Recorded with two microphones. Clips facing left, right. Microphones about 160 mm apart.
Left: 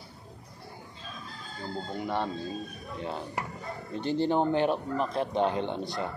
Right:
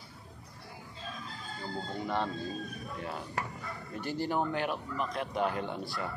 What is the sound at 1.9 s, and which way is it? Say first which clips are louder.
A man's voice: left 2 dB; 15° left (ahead or behind).